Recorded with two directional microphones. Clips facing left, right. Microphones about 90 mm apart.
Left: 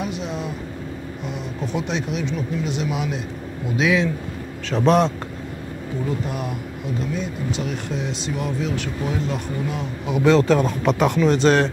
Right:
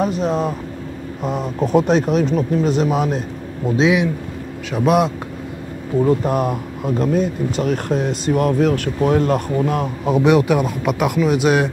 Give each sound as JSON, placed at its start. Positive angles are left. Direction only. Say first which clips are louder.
{"t": 0.0, "sound": "speech", "louder": "right 9 dB", "side_deg": -40}
{"t": 3.8, "sound": "speech", "louder": "right 3 dB", "side_deg": -15}
{"t": 6.0, "sound": "speech", "louder": "right 9 dB", "side_deg": -45}
{"t": 10.2, "sound": "speech", "louder": "even", "side_deg": -15}